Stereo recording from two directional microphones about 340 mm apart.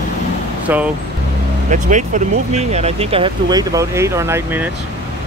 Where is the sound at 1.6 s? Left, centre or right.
Right.